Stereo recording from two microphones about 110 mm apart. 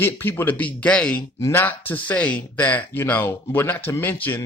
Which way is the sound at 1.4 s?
25° left (ahead or behind).